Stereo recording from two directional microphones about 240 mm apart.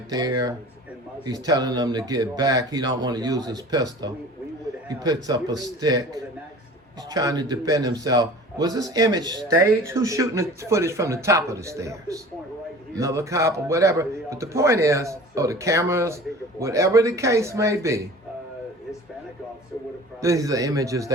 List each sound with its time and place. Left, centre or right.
0.1 s a man's voice: centre
20.2 s a man's voice: centre